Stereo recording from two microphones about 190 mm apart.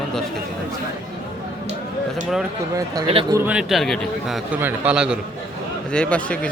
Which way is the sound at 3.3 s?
10° right (ahead or behind).